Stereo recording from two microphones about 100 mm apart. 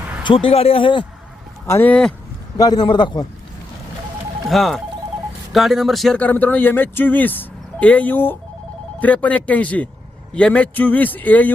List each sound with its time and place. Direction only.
0.0 s a sound: 15° right (ahead or behind)
0.3 s speech: 70° left (ahead or behind)
1.6 s speech: 25° left (ahead or behind)
1.9 s speech: 5° left (ahead or behind)
2.6 s a man's voice: 40° left (ahead or behind)
4.4 s speech: centre (ahead or behind)
6.1 s speech: 15° left (ahead or behind)